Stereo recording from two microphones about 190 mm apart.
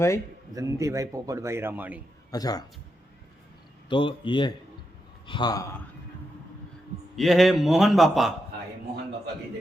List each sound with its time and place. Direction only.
0.5 s a man's voice: 15° right (ahead or behind)
2.3 s speech: 20° left (ahead or behind)
3.8 s speech: 25° left (ahead or behind)
7.2 s a man's voice: centre (ahead or behind)